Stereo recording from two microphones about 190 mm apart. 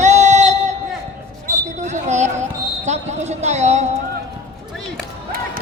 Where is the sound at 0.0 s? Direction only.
40° right (ahead or behind).